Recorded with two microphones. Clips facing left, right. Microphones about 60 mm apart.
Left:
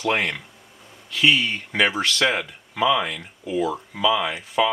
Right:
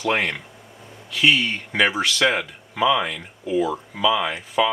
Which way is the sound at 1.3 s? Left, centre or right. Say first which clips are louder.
Right 1 dB; centre.